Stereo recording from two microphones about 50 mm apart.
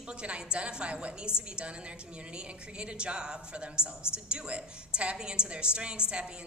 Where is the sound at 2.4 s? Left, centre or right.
Centre.